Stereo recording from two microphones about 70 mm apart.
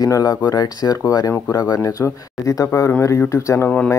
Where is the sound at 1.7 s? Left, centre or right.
Left.